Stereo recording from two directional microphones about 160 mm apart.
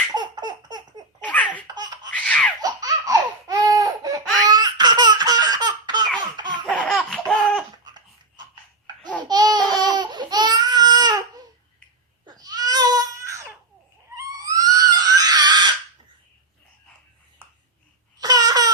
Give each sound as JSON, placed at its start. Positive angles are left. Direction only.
{"t": 0.1, "sound": "laughter", "side_deg": -25}
{"t": 1.2, "sound": "laughter", "side_deg": 10}
{"t": 2.1, "sound": "baby laughter", "side_deg": 5}
{"t": 2.6, "sound": "laughter", "side_deg": -25}
{"t": 6.7, "sound": "laughter", "side_deg": 5}
{"t": 9.2, "sound": "babbling", "side_deg": -25}
{"t": 9.6, "sound": "a sound", "side_deg": 5}
{"t": 9.8, "sound": "a sound", "side_deg": -25}
{"t": 12.2, "sound": "crying", "side_deg": -25}
{"t": 14.2, "sound": "screaming", "side_deg": -20}
{"t": 18.2, "sound": "a sound", "side_deg": -25}